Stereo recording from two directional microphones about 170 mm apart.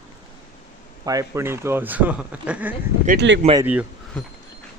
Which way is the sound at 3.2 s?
90° right.